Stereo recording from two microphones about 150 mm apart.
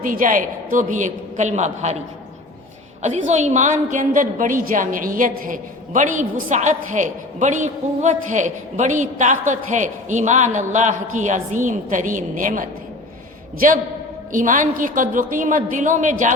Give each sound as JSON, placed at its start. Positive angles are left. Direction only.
{"t": 0.0, "sound": "a woman's voice", "side_deg": -65}
{"t": 3.0, "sound": "a woman's voice", "side_deg": -50}
{"t": 14.3, "sound": "a woman's voice", "side_deg": -60}